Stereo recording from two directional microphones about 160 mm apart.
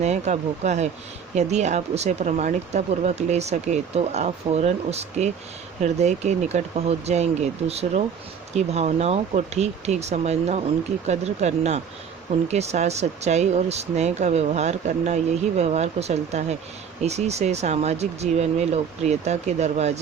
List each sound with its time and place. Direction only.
0.0 s speech: 45° right (ahead or behind)